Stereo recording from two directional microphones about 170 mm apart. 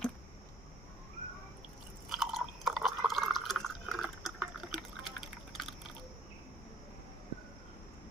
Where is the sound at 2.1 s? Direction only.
Centre (ahead or behind).